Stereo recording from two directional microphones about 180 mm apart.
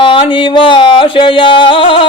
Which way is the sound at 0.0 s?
30° left (ahead or behind).